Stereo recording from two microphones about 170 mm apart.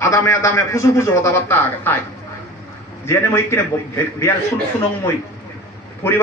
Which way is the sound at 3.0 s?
15° left (ahead or behind).